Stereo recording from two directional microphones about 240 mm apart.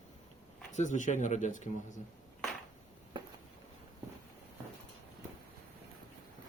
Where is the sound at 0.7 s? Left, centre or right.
Left.